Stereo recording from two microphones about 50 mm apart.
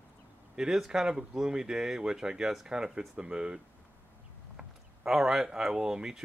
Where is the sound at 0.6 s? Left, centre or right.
Centre.